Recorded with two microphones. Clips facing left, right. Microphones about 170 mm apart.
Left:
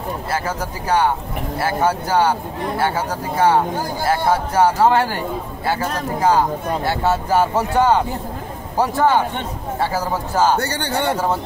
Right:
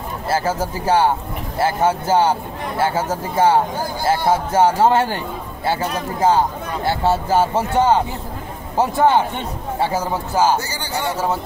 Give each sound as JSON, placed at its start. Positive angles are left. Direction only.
{"t": 0.3, "sound": "speech", "side_deg": -25}
{"t": 9.9, "sound": "a man's voice", "side_deg": -10}
{"t": 10.6, "sound": "a man's voice", "side_deg": 65}